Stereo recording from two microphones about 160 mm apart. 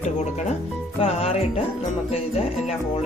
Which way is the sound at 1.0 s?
40° left (ahead or behind).